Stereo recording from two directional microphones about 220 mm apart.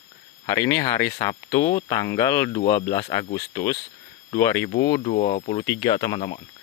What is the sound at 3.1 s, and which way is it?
Speech, 20° left (ahead or behind).